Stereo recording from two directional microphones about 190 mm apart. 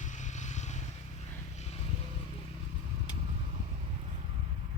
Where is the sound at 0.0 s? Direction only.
40° left (ahead or behind).